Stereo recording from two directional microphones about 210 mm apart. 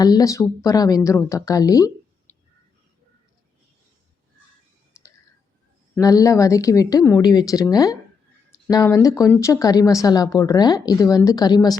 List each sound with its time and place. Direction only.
0.0 s a woman's voice: 20° left (ahead or behind)
6.0 s a woman's voice: 15° left (ahead or behind)